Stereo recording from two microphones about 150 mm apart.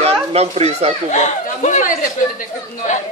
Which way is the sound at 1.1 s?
50° left (ahead or behind).